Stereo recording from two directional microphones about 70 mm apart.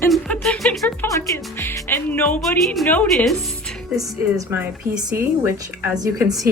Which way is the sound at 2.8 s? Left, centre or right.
Centre.